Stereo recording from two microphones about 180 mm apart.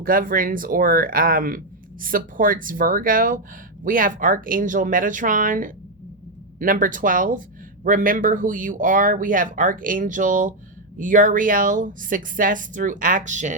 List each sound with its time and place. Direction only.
0.0 s speech: 50° right (ahead or behind)